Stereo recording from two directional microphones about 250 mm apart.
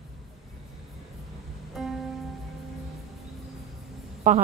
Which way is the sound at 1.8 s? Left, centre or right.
Centre.